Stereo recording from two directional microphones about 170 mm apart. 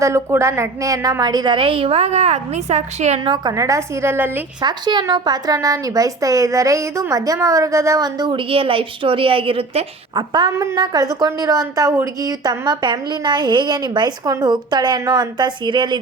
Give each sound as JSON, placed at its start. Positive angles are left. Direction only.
{"t": 0.0, "sound": "a woman's voice", "side_deg": -15}
{"t": 3.3, "sound": "a woman's voice", "side_deg": -20}
{"t": 4.6, "sound": "a woman's voice", "side_deg": -25}